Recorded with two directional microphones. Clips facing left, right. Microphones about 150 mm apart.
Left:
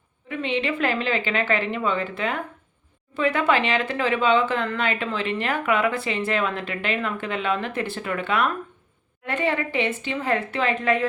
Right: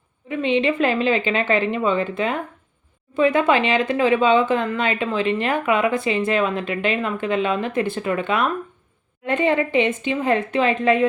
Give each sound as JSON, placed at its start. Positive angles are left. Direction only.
{"t": 0.3, "sound": "speech", "side_deg": -20}